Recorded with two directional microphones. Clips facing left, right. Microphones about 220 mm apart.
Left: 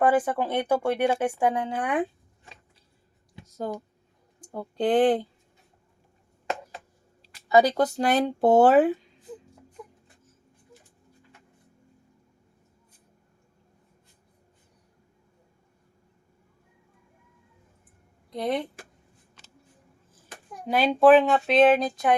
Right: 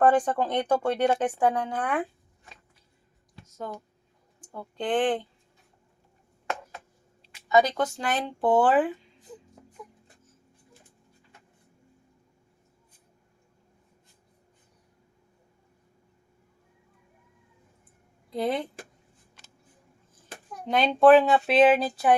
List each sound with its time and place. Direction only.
0.0 s speech: 5° left (ahead or behind)
3.6 s speech: 35° left (ahead or behind)
6.5 s a sound: 30° left (ahead or behind)
7.4 s speech: 35° left (ahead or behind)
18.3 s speech: centre (ahead or behind)
20.7 s speech: 5° left (ahead or behind)